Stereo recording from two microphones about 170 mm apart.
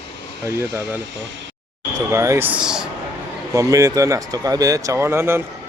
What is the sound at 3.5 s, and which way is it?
Speech, 20° right (ahead or behind).